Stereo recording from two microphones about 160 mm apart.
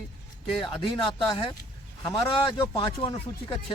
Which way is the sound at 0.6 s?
30° left (ahead or behind).